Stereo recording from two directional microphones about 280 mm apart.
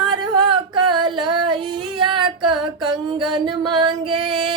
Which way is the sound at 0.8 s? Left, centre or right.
Centre.